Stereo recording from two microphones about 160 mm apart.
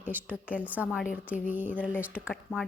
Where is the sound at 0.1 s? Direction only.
10° right (ahead or behind).